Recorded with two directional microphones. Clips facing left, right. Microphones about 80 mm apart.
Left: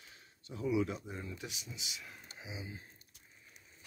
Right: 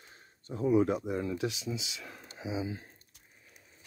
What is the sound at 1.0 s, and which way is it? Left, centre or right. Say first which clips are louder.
Speech: right 12 dB; right.